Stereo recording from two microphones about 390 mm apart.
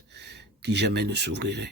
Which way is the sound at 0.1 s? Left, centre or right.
Right.